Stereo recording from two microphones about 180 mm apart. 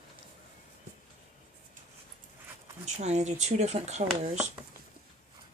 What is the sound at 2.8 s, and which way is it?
Speech, 40° right (ahead or behind).